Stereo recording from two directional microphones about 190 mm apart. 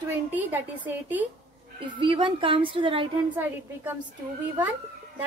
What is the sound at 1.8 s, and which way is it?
A woman's voice, 25° right (ahead or behind).